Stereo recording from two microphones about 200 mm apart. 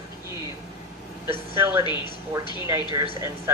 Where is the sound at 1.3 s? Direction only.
10° right (ahead or behind).